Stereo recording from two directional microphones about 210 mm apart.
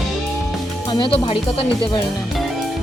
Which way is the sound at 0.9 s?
25° left (ahead or behind).